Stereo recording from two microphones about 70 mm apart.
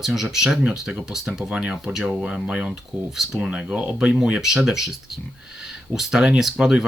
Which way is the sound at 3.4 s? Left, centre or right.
Centre.